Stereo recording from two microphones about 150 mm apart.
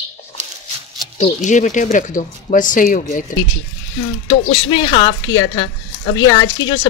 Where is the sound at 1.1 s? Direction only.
55° left (ahead or behind).